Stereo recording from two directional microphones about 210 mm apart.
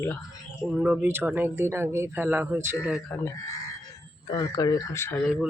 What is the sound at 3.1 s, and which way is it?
Speech, 15° left (ahead or behind).